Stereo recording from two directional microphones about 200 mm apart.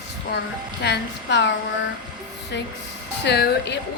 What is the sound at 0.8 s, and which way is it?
Speech, 60° left (ahead or behind).